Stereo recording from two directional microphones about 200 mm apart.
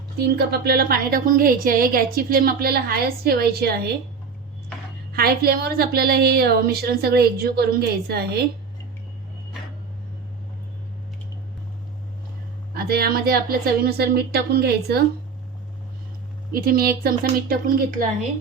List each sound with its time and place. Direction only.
0.2 s a woman's voice: 55° right (ahead or behind)
5.1 s a woman's voice: 50° right (ahead or behind)
12.7 s a woman's voice: 50° right (ahead or behind)
16.5 s a woman's voice: 45° right (ahead or behind)